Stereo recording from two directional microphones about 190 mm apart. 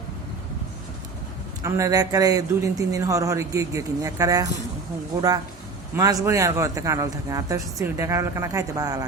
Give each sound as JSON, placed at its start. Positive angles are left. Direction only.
{"t": 1.6, "sound": "speech", "side_deg": -15}
{"t": 6.0, "sound": "speech", "side_deg": -15}